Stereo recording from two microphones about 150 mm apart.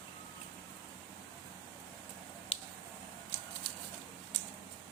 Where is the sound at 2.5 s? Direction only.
40° left (ahead or behind).